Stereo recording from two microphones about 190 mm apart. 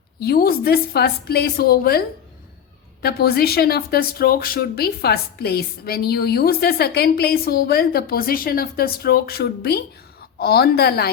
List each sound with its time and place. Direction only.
0.2 s a woman's voice: 55° left (ahead or behind)